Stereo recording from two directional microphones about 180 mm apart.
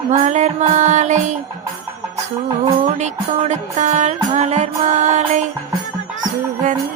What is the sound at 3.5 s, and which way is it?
Music, 40° right (ahead or behind).